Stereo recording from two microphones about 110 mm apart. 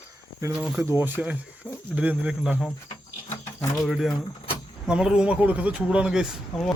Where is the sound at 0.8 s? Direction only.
25° right (ahead or behind).